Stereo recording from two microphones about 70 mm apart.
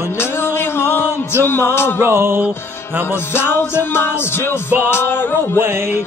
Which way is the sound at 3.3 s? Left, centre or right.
Left.